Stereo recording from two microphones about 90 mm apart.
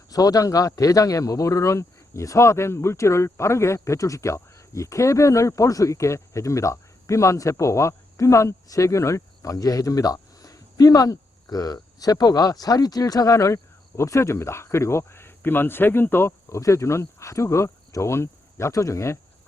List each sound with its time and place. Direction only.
0.1 s speech: 40° left (ahead or behind)